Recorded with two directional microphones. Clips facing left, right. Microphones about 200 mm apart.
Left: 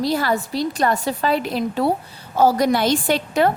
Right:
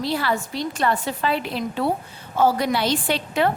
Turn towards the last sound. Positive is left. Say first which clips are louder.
# left 3 dB
turn(degrees=45)  # may be behind; listen again after turning